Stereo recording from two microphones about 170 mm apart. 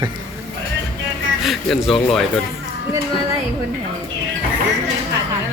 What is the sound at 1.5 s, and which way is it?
Speech, centre (ahead or behind).